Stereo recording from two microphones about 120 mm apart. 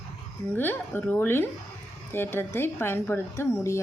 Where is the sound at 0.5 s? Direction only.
15° left (ahead or behind).